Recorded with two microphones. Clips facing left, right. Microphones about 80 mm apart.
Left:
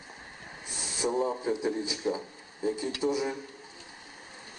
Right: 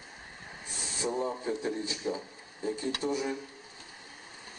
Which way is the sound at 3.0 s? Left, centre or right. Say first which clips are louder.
Left 4 dB; centre.